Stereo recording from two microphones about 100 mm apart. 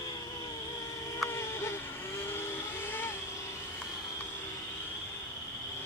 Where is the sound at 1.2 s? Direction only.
25° left (ahead or behind).